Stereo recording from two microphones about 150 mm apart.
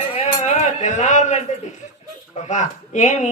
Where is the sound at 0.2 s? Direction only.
50° left (ahead or behind).